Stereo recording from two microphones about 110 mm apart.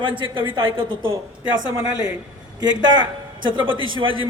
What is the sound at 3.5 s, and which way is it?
Speech, 50° right (ahead or behind).